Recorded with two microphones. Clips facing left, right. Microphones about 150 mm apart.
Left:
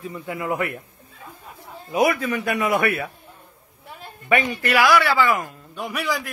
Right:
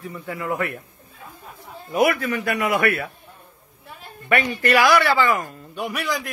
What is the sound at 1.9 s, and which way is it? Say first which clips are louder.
A man's voice: even; 15° left (ahead or behind).